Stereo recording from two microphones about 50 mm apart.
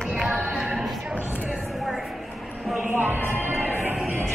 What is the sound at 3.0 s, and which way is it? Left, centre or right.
Music, right.